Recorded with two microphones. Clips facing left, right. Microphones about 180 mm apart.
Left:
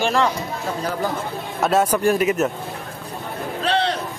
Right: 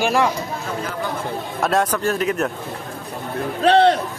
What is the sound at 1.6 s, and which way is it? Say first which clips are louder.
Speech: left 2 dB; centre (ahead or behind).